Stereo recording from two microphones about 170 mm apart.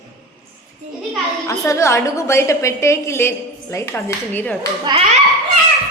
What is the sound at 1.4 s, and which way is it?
A woman's voice, 15° left (ahead or behind).